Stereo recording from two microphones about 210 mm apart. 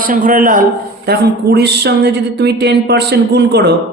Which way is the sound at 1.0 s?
50° right (ahead or behind).